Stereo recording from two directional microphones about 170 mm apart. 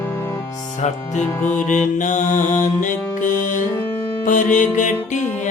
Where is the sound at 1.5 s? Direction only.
50° left (ahead or behind).